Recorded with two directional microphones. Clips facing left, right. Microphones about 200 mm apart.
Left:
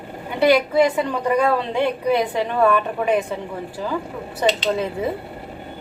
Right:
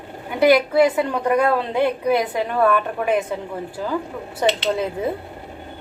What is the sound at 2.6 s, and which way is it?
Speech, 10° left (ahead or behind).